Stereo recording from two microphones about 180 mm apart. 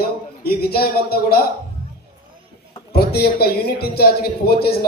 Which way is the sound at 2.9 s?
60° left (ahead or behind).